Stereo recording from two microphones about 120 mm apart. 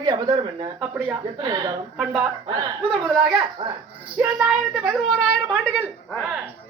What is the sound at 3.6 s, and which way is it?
Speech, 40° right (ahead or behind).